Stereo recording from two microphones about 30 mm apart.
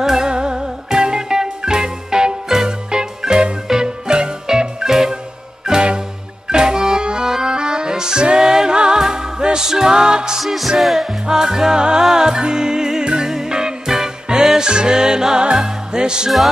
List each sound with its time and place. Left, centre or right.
0.0 s music: centre
0.3 s music: right
4.8 s music: centre
6.5 s music: right
10.4 s music: centre
11.2 s music: right